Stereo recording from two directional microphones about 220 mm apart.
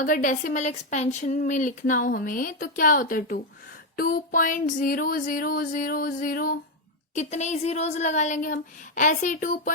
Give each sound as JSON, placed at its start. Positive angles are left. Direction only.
{"t": 0.0, "sound": "speech", "side_deg": 35}